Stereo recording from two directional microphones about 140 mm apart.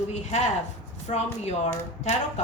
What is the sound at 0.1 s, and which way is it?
Speech, 55° left (ahead or behind).